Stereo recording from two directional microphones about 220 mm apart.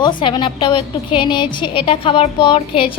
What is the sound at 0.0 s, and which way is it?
A woman's voice, 20° left (ahead or behind).